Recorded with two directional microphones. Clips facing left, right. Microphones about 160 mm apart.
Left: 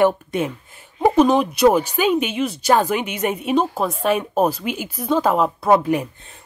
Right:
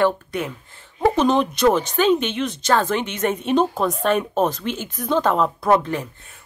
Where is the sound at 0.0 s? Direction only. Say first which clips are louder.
Left 3 dB; 20° left (ahead or behind).